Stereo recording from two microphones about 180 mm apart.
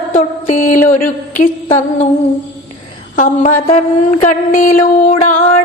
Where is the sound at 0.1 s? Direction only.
45° left (ahead or behind).